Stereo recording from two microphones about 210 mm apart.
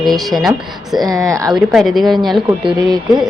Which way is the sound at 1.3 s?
15° right (ahead or behind).